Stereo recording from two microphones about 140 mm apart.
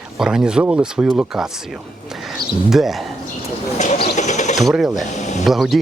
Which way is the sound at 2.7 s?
Centre (ahead or behind).